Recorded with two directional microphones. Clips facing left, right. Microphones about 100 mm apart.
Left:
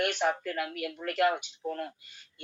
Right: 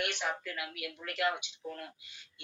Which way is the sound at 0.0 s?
45° left (ahead or behind).